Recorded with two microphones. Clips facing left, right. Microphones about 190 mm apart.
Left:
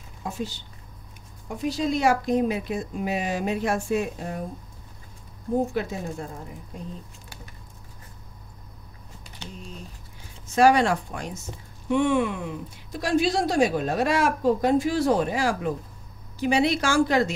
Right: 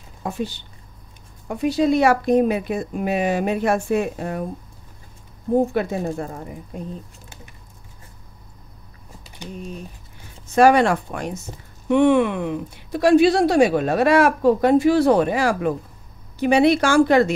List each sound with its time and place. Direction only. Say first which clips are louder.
0.2 s speech: right 5 dB; 60° right (ahead or behind)
5.7 s speech: right 6 dB; 60° right (ahead or behind)
10.5 s speech: right 4 dB; 60° right (ahead or behind)